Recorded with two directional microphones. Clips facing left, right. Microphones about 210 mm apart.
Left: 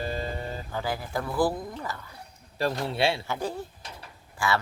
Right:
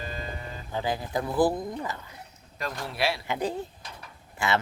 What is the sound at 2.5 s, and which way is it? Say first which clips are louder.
Speech: left 6 dB; 30° left (ahead or behind).